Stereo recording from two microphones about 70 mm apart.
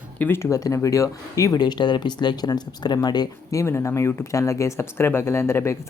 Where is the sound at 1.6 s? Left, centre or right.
Left.